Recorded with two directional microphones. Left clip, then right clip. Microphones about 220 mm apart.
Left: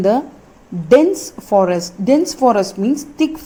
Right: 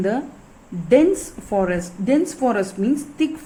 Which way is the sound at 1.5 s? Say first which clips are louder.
Left 7 dB; 15° left (ahead or behind).